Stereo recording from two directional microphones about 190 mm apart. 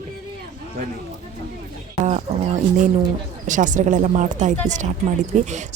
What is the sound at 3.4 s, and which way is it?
Speech, 40° right (ahead or behind).